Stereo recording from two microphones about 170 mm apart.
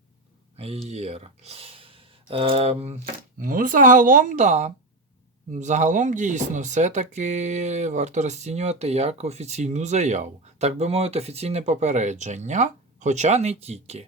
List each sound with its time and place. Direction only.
0.5 s speech: 35° right (ahead or behind)
3.0 s speech: 50° right (ahead or behind)